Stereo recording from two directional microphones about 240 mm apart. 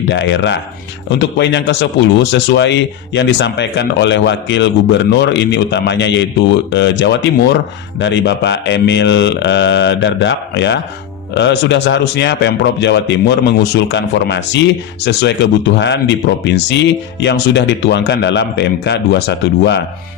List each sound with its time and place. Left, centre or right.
0.1 s speech: left